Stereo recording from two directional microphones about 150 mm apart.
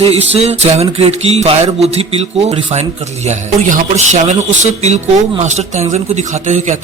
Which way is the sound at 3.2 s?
55° right (ahead or behind).